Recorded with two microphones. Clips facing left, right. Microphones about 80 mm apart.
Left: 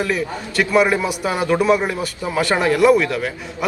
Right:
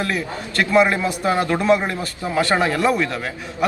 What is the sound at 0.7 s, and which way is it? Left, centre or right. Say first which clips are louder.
A man's voice: even; centre.